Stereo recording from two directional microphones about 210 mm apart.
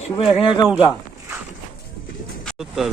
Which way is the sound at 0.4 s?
20° left (ahead or behind).